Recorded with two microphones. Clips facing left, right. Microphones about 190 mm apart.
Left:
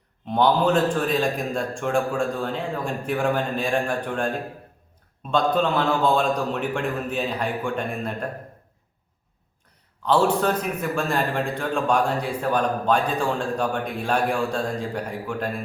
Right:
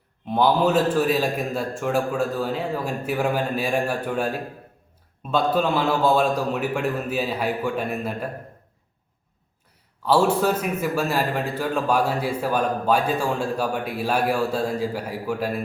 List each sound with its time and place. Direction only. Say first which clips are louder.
0.3 s a man's voice: even; 5° right (ahead or behind)
10.0 s a man's voice: right 1 dB; 10° right (ahead or behind)